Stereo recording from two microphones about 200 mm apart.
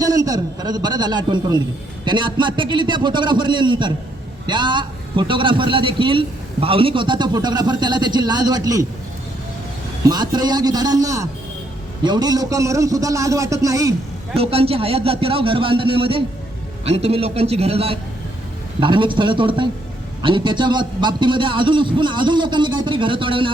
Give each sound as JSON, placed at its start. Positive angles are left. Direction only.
{"t": 0.0, "sound": "a man's voice", "side_deg": -15}
{"t": 10.1, "sound": "a man's voice", "side_deg": -20}
{"t": 14.3, "sound": "a man's voice", "side_deg": -30}